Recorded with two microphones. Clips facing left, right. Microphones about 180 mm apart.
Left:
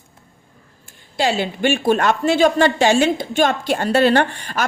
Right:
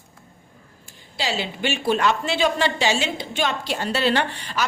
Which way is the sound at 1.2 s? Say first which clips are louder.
Left 7 dB; 50° left (ahead or behind).